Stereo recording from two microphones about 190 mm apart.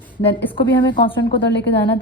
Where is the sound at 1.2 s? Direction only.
65° left (ahead or behind).